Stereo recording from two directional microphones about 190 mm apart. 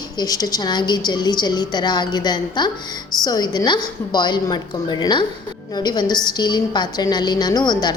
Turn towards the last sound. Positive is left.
turn(degrees=20)  # may be behind; listen again after turning